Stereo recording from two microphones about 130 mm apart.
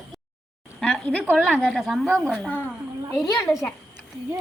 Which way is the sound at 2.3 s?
15° left (ahead or behind).